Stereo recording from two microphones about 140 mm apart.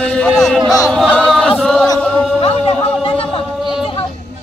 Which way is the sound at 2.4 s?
45° left (ahead or behind).